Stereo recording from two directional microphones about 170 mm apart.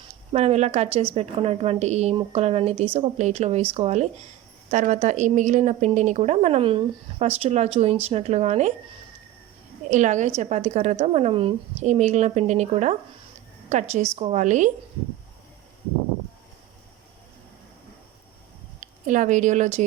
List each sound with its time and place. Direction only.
0.3 s a woman's voice: 40° right (ahead or behind)
9.9 s a woman's voice: 45° right (ahead or behind)
18.8 s a woman's voice: 45° right (ahead or behind)